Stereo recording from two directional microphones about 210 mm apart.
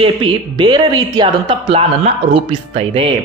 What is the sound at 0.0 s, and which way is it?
A woman's voice, 25° right (ahead or behind).